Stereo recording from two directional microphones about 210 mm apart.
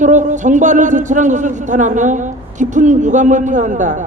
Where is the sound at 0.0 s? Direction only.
35° right (ahead or behind).